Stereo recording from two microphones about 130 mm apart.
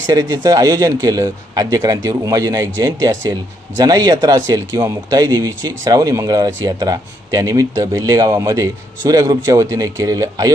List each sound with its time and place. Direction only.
0.0 s speech: 30° right (ahead or behind)